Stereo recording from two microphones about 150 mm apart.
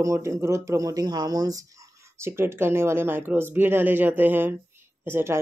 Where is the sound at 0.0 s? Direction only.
20° right (ahead or behind).